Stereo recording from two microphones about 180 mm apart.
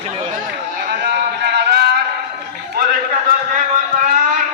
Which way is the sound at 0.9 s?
60° right (ahead or behind).